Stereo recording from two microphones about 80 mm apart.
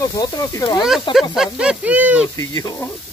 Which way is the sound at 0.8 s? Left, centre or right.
Centre.